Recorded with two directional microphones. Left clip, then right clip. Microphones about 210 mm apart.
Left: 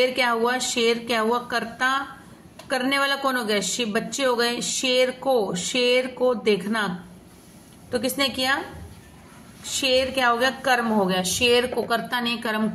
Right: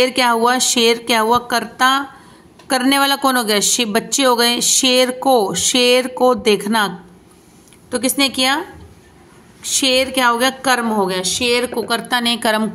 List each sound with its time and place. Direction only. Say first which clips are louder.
0.0 s a woman's voice: right 7 dB; 55° right (ahead or behind)
7.9 s a woman's voice: right 6 dB; 50° right (ahead or behind)
9.6 s a woman's voice: right 6 dB; 50° right (ahead or behind)